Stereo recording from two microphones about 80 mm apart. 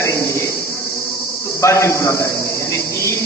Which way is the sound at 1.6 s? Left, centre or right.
Left.